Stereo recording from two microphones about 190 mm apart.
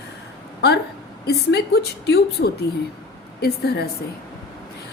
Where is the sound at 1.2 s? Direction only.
60° left (ahead or behind).